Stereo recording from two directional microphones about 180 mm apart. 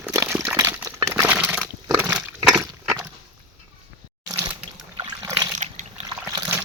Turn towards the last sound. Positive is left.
turn(degrees=-15)  # may be behind; listen again after turning